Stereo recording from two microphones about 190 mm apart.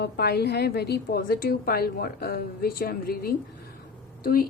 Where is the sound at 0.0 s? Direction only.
60° left (ahead or behind).